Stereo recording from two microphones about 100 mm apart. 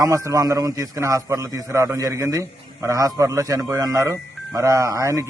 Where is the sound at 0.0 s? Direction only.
30° right (ahead or behind).